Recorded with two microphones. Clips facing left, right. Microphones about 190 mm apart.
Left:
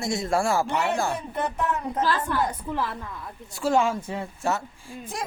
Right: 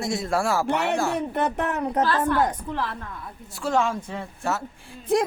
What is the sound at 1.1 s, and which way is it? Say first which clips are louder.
A woman's voice: right 4 dB; 70° right (ahead or behind).